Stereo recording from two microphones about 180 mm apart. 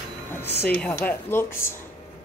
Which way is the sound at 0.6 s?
5° left (ahead or behind).